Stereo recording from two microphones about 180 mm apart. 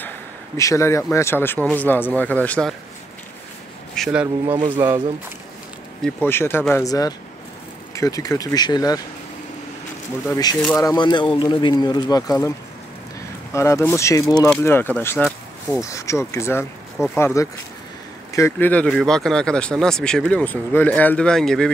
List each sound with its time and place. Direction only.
0.6 s speech: 15° left (ahead or behind)
3.9 s speech: centre (ahead or behind)
4.6 s speech: 25° right (ahead or behind)
6.0 s speech: 15° left (ahead or behind)
10.2 s speech: 20° left (ahead or behind); by 21.6 s 5° left (ahead or behind)